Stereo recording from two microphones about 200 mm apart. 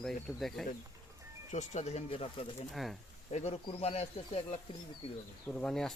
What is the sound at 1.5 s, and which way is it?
Speech, 35° left (ahead or behind).